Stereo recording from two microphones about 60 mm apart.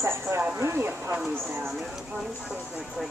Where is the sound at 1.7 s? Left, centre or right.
Centre.